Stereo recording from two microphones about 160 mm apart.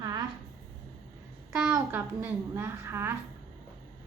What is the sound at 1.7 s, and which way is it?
Speech, 10° right (ahead or behind).